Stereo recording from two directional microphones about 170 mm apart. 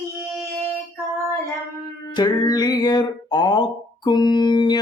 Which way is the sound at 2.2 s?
25° left (ahead or behind).